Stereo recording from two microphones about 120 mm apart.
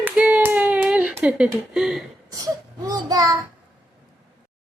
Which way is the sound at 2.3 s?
30° right (ahead or behind).